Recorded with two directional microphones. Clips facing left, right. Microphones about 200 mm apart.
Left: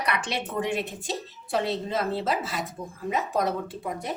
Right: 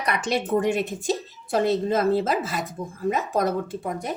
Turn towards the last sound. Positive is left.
turn(degrees=-45)  # may be behind; listen again after turning